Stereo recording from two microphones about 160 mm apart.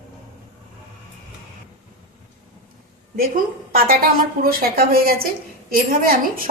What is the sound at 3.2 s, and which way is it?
A woman's voice, 65° right (ahead or behind).